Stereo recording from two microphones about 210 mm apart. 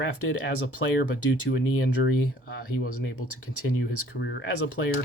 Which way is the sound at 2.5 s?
45° left (ahead or behind).